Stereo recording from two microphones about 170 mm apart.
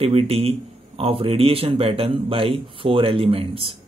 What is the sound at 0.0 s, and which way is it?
A man's voice, 35° right (ahead or behind).